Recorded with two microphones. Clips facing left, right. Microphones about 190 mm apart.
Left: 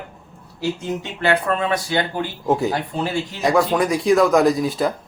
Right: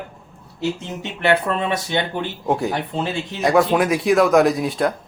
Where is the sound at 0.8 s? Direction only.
25° right (ahead or behind).